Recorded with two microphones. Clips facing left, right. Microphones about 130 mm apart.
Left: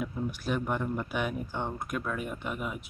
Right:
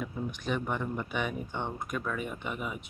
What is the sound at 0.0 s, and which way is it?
Speech, 5° left (ahead or behind).